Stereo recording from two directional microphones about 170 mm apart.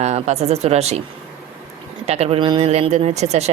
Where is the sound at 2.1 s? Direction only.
35° right (ahead or behind).